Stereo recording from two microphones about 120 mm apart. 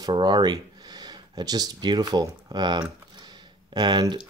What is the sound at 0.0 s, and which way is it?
Speech, 40° right (ahead or behind).